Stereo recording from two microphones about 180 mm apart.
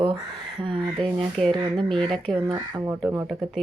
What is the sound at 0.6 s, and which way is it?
Speech, 30° right (ahead or behind).